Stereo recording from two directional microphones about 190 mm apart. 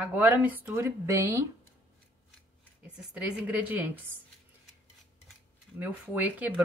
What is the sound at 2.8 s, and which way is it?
Speech, 5° right (ahead or behind).